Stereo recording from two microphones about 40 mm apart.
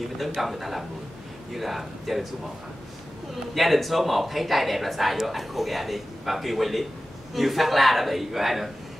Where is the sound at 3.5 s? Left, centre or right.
Centre.